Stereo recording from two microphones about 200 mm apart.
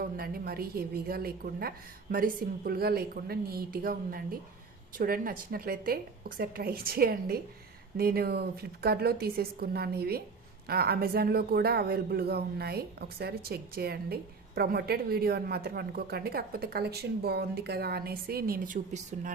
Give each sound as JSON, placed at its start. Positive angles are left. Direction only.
{"t": 0.0, "sound": "speech", "side_deg": -50}